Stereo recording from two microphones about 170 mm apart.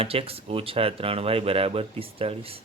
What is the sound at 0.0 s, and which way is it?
Speech, 35° right (ahead or behind).